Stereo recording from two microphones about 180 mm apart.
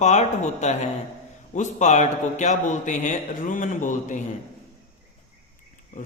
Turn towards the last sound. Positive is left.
turn(degrees=45)  # may be behind; listen again after turning